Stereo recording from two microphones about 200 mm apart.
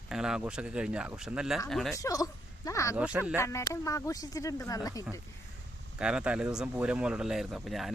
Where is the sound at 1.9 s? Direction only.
15° left (ahead or behind).